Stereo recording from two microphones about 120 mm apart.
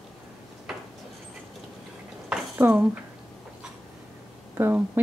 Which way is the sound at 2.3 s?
15° right (ahead or behind).